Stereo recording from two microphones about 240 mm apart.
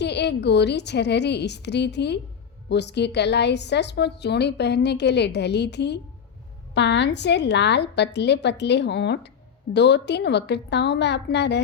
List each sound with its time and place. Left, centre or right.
0.0 s a woman's voice: left